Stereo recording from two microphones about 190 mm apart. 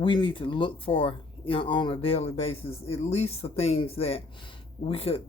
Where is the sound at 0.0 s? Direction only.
25° left (ahead or behind).